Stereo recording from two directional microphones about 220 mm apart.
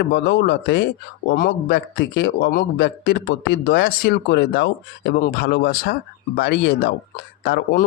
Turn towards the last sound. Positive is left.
turn(degrees=45)  # may be behind; listen again after turning